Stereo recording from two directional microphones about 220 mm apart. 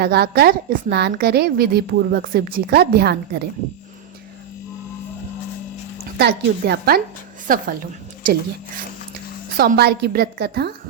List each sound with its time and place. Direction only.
0.0 s a woman's voice: 45° right (ahead or behind)
6.1 s a woman's voice: 50° right (ahead or behind)
9.6 s a woman's voice: 45° right (ahead or behind)